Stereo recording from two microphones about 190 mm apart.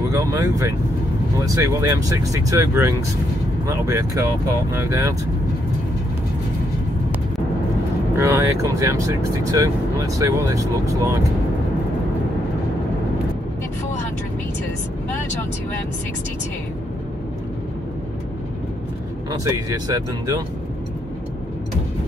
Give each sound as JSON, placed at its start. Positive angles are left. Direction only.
{"t": 0.1, "sound": "speech", "side_deg": -15}
{"t": 8.2, "sound": "speech", "side_deg": -15}
{"t": 19.4, "sound": "speech", "side_deg": -20}